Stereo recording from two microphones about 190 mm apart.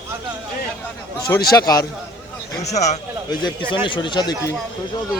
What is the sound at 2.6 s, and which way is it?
Speech, 35° left (ahead or behind).